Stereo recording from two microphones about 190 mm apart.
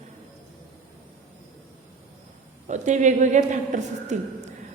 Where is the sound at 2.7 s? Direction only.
40° right (ahead or behind).